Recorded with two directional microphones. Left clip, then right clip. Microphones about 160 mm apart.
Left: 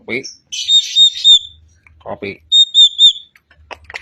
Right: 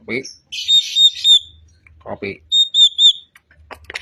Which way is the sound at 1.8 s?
Centre (ahead or behind).